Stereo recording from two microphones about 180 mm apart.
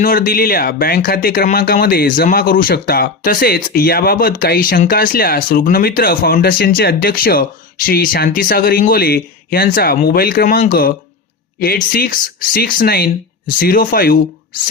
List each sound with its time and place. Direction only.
0.0 s speech: 50° left (ahead or behind)